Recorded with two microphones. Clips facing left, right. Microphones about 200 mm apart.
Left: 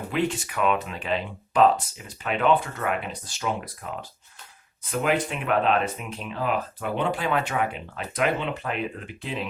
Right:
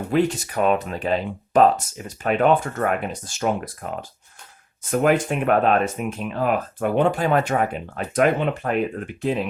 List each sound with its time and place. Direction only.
0.1 s speech: 40° right (ahead or behind)